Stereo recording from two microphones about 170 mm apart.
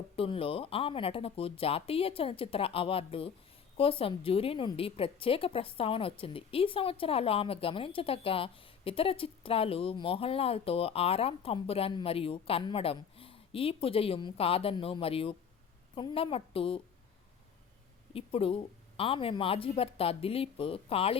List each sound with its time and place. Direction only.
0.2 s a woman's voice: 35° left (ahead or behind)
18.1 s a woman's voice: 35° left (ahead or behind)